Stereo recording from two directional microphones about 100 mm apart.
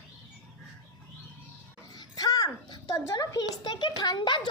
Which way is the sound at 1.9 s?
40° left (ahead or behind).